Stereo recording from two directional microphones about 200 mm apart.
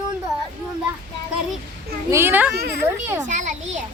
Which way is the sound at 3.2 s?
40° right (ahead or behind).